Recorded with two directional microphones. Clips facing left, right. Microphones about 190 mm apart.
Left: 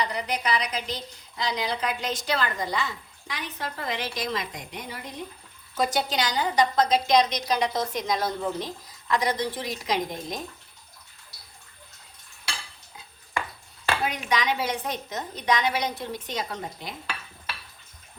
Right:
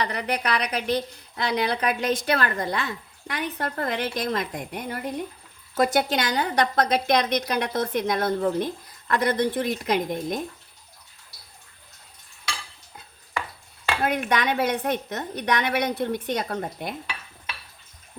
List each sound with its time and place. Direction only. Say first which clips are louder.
0.0 s a woman's voice: right 2 dB; 60° right (ahead or behind)
14.0 s a woman's voice: right 6 dB; 55° right (ahead or behind)